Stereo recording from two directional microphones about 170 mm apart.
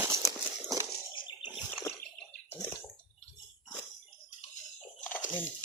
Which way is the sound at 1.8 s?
15° left (ahead or behind).